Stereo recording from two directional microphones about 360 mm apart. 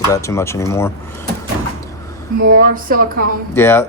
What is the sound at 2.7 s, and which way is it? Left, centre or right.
Speech, right.